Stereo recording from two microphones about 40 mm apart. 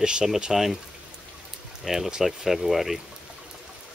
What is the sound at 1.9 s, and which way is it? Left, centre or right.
Speech, centre.